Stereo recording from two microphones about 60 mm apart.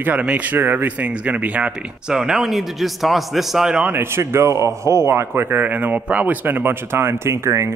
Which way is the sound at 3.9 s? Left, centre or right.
Right.